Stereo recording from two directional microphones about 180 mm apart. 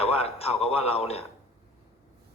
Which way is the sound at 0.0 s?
35° left (ahead or behind).